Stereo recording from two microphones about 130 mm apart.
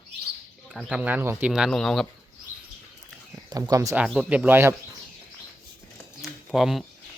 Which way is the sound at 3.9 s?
5° right (ahead or behind).